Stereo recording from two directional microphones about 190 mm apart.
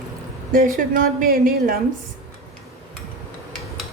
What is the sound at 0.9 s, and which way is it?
Speech, 50° right (ahead or behind).